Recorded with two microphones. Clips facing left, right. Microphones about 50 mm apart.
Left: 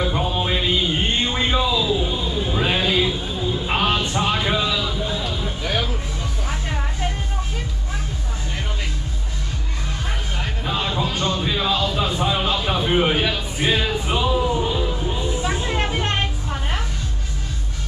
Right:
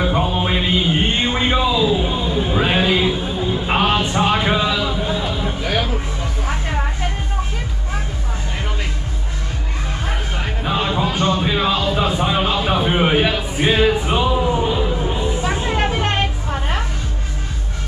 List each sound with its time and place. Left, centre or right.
0.0 s music: right
10.4 s music: centre